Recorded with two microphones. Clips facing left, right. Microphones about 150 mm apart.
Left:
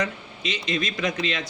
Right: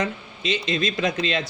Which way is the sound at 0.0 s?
30° right (ahead or behind).